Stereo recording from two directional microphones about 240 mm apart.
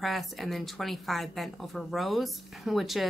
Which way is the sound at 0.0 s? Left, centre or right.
Centre.